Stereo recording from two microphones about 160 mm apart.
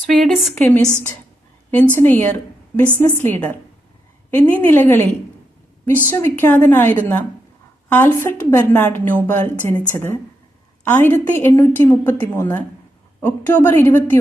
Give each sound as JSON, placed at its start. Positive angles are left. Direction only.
{"t": 0.1, "sound": "a woman's voice", "side_deg": 0}
{"t": 6.1, "sound": "a woman's voice", "side_deg": 15}